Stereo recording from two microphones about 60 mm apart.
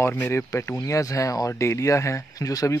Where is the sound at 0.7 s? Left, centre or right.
Left.